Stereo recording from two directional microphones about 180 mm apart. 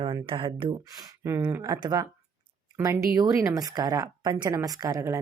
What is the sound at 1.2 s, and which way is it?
Speech, 15° right (ahead or behind).